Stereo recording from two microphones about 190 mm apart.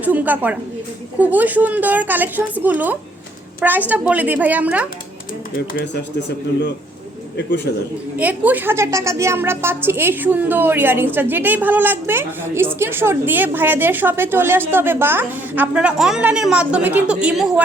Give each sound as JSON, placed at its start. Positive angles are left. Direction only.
{"t": 0.0, "sound": "a woman's voice", "side_deg": -10}
{"t": 5.8, "sound": "a man's voice", "side_deg": 65}
{"t": 8.2, "sound": "a woman's voice", "side_deg": -10}